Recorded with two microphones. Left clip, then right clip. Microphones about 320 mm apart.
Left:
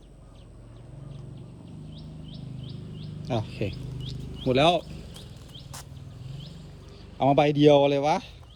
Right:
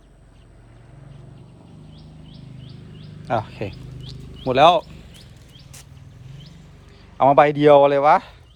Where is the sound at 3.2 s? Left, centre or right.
Centre.